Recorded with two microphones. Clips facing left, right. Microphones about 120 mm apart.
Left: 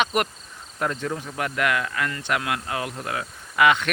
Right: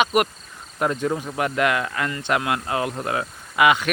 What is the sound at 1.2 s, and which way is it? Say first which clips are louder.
Cricket: right 4 dB; 20° right (ahead or behind).